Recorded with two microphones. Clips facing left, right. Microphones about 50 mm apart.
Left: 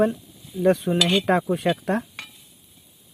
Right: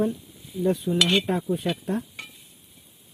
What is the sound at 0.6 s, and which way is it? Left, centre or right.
Cutlery, left.